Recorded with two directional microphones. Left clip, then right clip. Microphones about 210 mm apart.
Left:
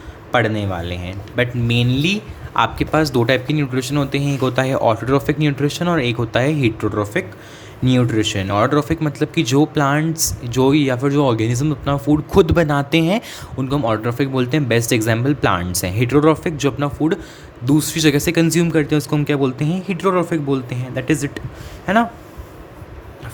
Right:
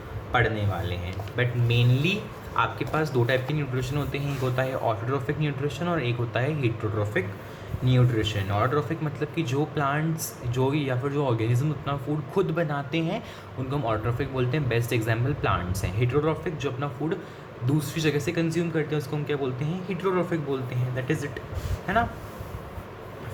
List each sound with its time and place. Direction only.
0.3 s speech: 50° left (ahead or behind)